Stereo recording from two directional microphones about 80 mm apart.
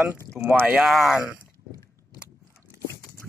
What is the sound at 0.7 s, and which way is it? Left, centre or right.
Speech, centre.